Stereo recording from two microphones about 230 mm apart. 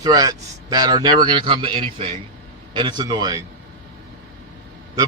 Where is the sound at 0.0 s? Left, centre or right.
Centre.